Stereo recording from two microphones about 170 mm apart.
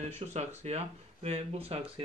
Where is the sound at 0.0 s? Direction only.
40° right (ahead or behind).